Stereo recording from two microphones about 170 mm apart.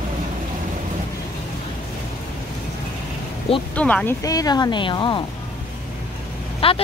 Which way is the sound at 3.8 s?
5° left (ahead or behind).